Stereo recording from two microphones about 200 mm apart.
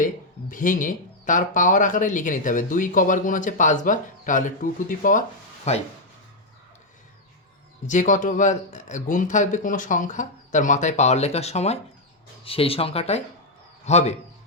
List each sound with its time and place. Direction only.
0.0 s speech: 40° left (ahead or behind)
7.9 s speech: 40° left (ahead or behind)